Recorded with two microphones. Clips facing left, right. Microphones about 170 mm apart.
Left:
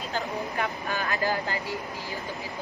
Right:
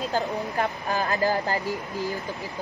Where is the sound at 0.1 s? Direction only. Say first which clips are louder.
Right 4 dB; 40° right (ahead or behind).